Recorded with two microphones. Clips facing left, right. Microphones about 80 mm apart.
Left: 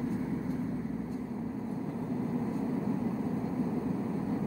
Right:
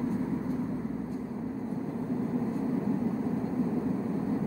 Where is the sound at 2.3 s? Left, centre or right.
Centre.